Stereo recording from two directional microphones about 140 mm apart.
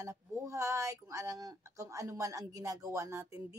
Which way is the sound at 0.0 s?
20° right (ahead or behind).